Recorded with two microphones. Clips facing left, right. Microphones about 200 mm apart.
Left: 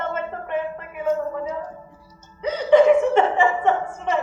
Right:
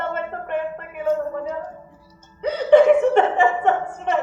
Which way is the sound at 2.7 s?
60° right (ahead or behind).